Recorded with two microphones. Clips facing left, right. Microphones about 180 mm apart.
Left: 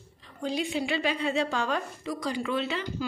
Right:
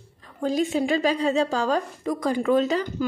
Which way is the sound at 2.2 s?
50° right (ahead or behind).